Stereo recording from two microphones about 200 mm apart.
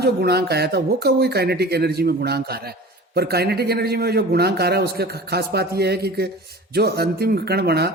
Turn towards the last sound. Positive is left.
turn(degrees=-55)  # may be behind; listen again after turning